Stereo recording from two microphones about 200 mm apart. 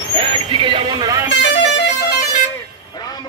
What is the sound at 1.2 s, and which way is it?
Music, 60° left (ahead or behind).